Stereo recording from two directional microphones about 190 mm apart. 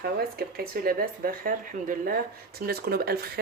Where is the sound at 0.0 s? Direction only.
55° right (ahead or behind).